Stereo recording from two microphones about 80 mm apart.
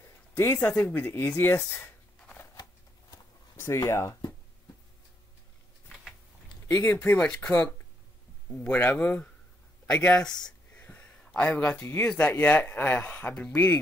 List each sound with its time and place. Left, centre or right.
0.4 s speech: left
3.5 s speech: left
7.2 s a man's voice: centre
10.0 s speech: centre
10.7 s a sound: left
11.3 s speech: centre